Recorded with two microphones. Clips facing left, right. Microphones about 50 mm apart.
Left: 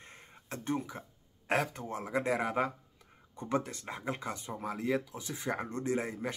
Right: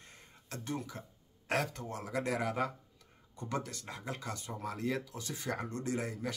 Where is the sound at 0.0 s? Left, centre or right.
Left.